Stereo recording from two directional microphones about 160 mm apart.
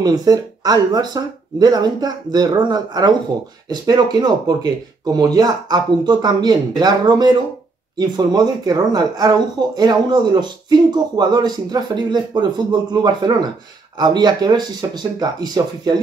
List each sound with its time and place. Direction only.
0.0 s speech: 25° right (ahead or behind)